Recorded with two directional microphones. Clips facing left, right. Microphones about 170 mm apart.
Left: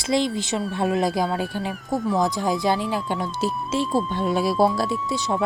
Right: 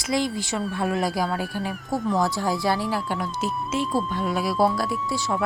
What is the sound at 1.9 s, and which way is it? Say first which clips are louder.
Speech: left 1 dB; centre (ahead or behind).